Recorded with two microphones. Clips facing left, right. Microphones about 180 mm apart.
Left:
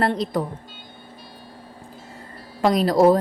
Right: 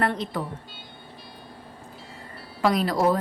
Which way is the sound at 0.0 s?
35° left (ahead or behind).